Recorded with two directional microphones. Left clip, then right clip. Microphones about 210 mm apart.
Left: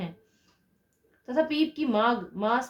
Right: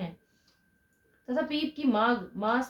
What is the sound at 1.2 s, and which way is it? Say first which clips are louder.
A woman's voice: left 5 dB; 40° left (ahead or behind).